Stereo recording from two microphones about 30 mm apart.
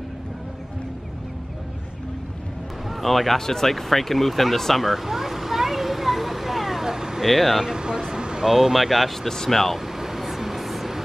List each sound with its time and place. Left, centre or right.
2.9 s speech: centre
3.3 s speech: centre
4.7 s a sound: centre
7.2 s speech: centre
7.6 s speech: right
8.2 s vehicle: right
8.5 s speech: centre
8.7 s speech: centre
9.3 s speech: centre
9.8 s vehicle: centre